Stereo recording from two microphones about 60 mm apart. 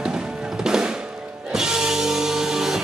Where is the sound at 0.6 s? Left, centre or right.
Centre.